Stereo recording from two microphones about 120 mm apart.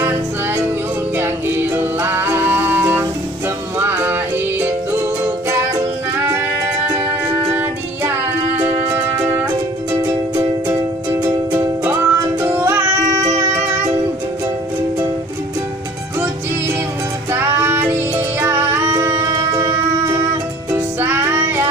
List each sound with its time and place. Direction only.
1.1 s music: 20° right (ahead or behind)
7.5 s music: 25° right (ahead or behind)
10.0 s music: 30° right (ahead or behind)
17.3 s music: 20° right (ahead or behind)